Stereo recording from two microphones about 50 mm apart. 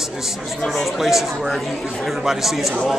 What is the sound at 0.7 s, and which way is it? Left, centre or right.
Speech, centre.